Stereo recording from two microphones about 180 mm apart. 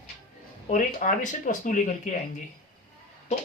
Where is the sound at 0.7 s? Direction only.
45° left (ahead or behind).